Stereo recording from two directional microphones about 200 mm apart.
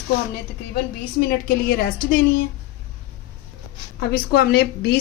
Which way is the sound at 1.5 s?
50° left (ahead or behind).